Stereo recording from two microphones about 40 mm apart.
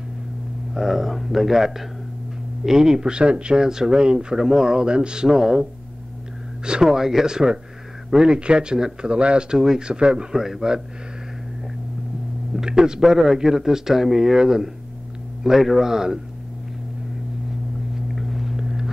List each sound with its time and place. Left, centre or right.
0.7 s speech: centre; by 9.6 s right
9.6 s speech: centre
9.8 s speech: right
10.3 s speech: centre
12.5 s speech: centre
17.9 s vehicle: centre